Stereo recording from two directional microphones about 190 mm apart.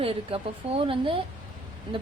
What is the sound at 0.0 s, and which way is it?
Speech, 30° right (ahead or behind).